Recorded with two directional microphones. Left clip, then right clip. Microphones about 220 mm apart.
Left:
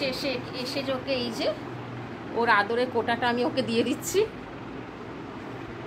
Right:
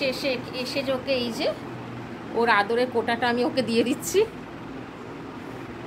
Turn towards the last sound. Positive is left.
turn(degrees=-25)  # may be behind; listen again after turning